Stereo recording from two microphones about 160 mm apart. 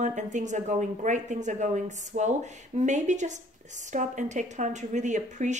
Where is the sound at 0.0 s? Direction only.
50° right (ahead or behind).